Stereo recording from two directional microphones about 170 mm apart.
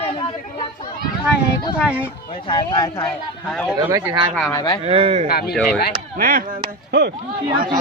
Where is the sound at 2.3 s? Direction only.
25° left (ahead or behind).